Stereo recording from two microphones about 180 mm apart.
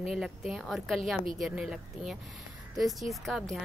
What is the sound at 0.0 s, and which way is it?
A woman's voice, centre (ahead or behind).